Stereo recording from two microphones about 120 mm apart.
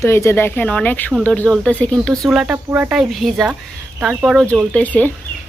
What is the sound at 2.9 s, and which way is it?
Speech, centre (ahead or behind).